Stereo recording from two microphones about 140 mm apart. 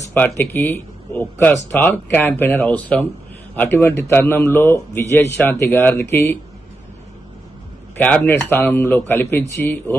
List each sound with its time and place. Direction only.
0.1 s a man's voice: 15° left (ahead or behind)
7.9 s a man's voice: 10° left (ahead or behind)